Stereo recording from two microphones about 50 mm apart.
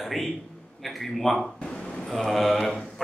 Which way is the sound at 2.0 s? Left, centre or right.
Centre.